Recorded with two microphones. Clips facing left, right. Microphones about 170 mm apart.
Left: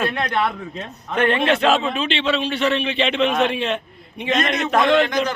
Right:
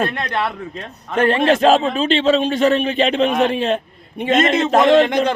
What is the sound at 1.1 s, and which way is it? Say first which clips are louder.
A man's voice: right 3 dB; 40° right (ahead or behind).